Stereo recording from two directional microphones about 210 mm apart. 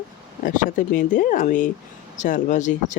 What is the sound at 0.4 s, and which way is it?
Speech, 35° left (ahead or behind).